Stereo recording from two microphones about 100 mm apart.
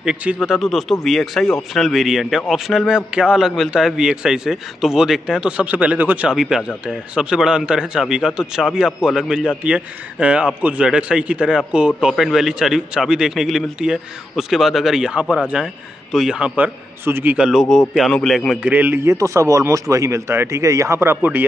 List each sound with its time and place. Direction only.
0.0 s speech: 10° right (ahead or behind)
0.4 s speech: centre (ahead or behind)
6.3 s speech: 5° right (ahead or behind); by 17.4 s 20° right (ahead or behind)
17.4 s speech: centre (ahead or behind)
18.6 s a man's voice: 15° right (ahead or behind)